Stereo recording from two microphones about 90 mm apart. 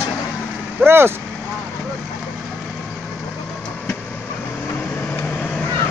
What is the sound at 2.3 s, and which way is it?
Vehicle, centre (ahead or behind).